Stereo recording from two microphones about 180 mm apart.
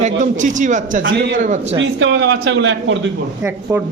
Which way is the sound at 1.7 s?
90° right.